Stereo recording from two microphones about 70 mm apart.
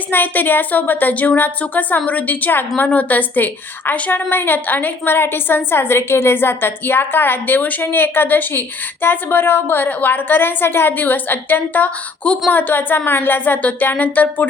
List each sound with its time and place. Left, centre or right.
0.1 s a woman's voice: left